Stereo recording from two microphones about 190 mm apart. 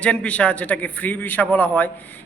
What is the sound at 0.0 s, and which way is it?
A man's voice, 5° left (ahead or behind).